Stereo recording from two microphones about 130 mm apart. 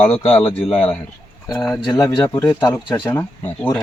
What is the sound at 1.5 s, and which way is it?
Speech, 10° left (ahead or behind).